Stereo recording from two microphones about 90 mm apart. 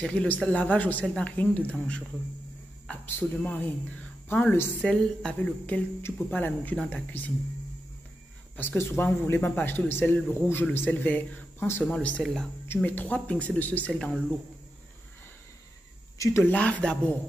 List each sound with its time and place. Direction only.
0.0 s speech: 10° left (ahead or behind)
3.1 s speech: 20° left (ahead or behind)
6.0 s speech: 25° left (ahead or behind)
8.5 s speech: 25° left (ahead or behind)
16.4 s speech: 15° left (ahead or behind)